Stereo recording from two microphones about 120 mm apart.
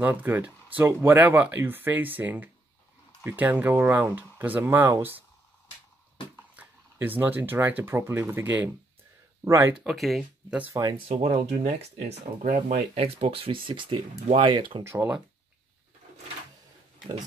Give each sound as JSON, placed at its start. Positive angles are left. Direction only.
{"t": 0.0, "sound": "speech", "side_deg": -15}
{"t": 6.5, "sound": "speech", "side_deg": -15}
{"t": 9.8, "sound": "speech", "side_deg": 0}
{"t": 10.7, "sound": "speech", "side_deg": -30}
{"t": 11.1, "sound": "speech", "side_deg": -65}
{"t": 13.0, "sound": "speech", "side_deg": -50}
{"t": 14.8, "sound": "speech", "side_deg": -20}